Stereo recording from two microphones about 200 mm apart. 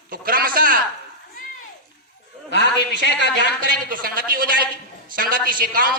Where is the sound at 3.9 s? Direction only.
45° right (ahead or behind).